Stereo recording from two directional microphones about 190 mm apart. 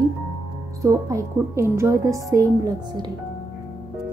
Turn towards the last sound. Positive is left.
turn(degrees=-20)  # may be behind; listen again after turning